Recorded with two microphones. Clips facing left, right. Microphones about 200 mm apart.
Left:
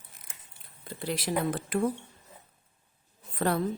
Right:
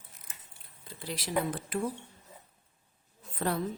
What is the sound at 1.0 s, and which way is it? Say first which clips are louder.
Speech: left 3 dB; 55° left (ahead or behind).